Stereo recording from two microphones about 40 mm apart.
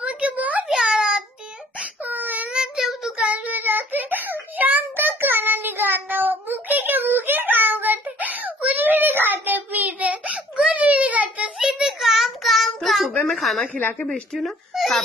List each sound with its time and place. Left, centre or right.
0.0 s a sound: right
0.8 s child singing: centre
2.0 s child singing: right
2.5 s child singing: centre
3.3 s child singing: right
11.6 s child singing: centre
12.4 s child singing: centre
13.1 s a sound: centre
13.4 s a sound: centre
14.0 s speech: centre
14.4 s a child's voice: centre